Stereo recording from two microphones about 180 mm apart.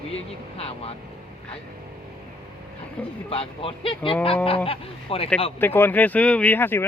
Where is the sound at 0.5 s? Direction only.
35° left (ahead or behind).